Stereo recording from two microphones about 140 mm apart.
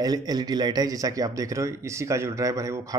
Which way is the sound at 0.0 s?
30° right (ahead or behind).